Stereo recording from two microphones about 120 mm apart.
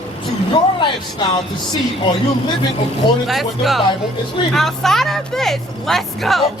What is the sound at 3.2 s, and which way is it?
Speech, centre (ahead or behind).